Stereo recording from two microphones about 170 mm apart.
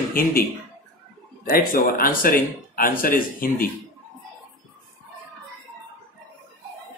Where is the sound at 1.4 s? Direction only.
60° left (ahead or behind).